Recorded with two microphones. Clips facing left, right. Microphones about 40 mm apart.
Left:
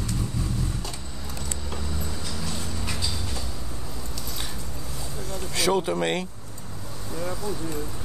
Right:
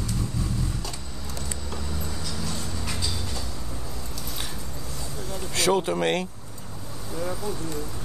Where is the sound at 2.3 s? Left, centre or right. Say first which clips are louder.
Right 1 dB; centre.